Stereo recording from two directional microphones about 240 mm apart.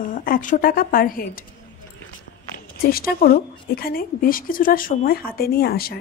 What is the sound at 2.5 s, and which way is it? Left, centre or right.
A woman's voice, left.